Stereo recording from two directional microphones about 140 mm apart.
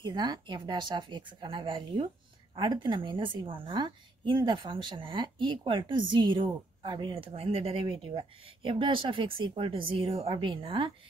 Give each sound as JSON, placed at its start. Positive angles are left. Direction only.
{"t": 0.0, "sound": "a woman's voice", "side_deg": -30}